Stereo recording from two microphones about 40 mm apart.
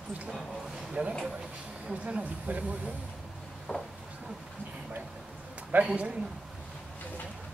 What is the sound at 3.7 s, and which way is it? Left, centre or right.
Speech, left.